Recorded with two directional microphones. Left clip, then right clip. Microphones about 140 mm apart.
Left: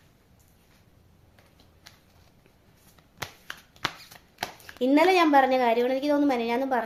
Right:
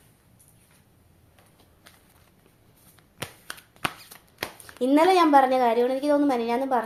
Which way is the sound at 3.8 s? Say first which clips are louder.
Right 2 dB; 20° right (ahead or behind).